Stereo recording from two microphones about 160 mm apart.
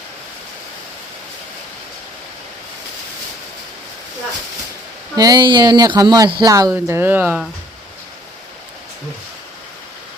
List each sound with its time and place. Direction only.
5.1 s speech: 25° right (ahead or behind)